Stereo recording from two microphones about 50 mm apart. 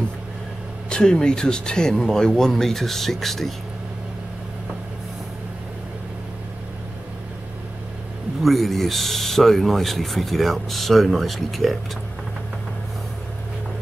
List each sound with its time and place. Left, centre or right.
0.8 s speech: centre
8.4 s speech: centre